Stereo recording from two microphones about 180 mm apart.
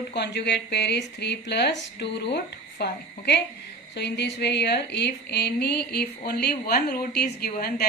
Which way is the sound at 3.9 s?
70° left (ahead or behind).